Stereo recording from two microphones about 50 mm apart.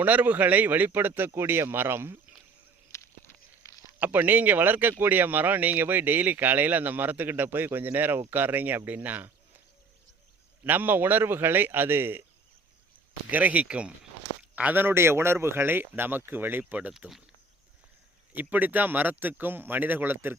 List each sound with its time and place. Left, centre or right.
0.0 s speech: right
0.9 s a man's voice: right
2.9 s a sound: left
4.0 s speech: right
10.6 s a man's voice: right
13.3 s speech: right
14.5 s a man's voice: right
18.3 s speech: right